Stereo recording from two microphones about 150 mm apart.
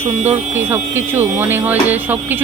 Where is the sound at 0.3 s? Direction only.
15° right (ahead or behind).